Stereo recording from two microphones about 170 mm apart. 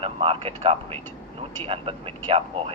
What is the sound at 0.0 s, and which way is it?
Speech, 35° right (ahead or behind).